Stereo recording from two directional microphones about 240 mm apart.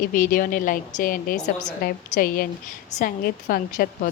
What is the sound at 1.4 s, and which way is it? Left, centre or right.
Speech, centre.